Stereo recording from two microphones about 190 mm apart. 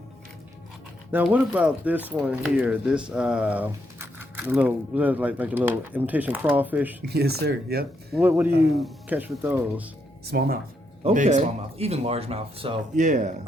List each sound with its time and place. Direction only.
1.1 s speech: 10° right (ahead or behind)
7.0 s speech: 55° right (ahead or behind)
8.1 s speech: 10° right (ahead or behind)
10.3 s speech: 55° right (ahead or behind)
11.0 s speech: 40° right (ahead or behind)